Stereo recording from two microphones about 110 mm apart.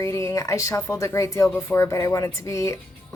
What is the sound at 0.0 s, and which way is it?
A woman's voice, 30° left (ahead or behind).